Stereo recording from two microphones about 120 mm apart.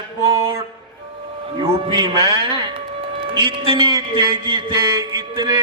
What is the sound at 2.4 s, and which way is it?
A man's voice, 40° right (ahead or behind).